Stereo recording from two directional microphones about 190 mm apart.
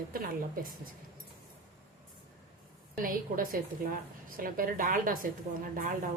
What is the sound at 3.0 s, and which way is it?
A woman's voice, 45° right (ahead or behind).